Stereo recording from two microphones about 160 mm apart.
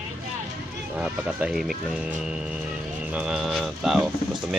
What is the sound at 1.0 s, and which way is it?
Speech, 5° right (ahead or behind).